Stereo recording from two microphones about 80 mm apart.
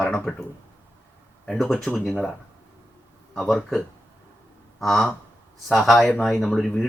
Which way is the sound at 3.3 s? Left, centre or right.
Centre.